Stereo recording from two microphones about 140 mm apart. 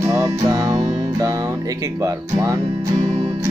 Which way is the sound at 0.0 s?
20° right (ahead or behind).